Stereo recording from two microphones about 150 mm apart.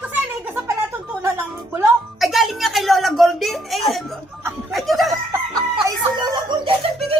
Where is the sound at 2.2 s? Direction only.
Centre (ahead or behind).